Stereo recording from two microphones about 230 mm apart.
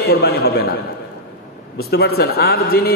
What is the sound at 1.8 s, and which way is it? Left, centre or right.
A man's voice, left.